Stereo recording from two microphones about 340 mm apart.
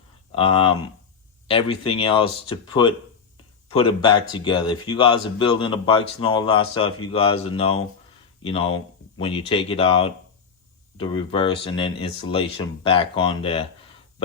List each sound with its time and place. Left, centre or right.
0.3 s speech: centre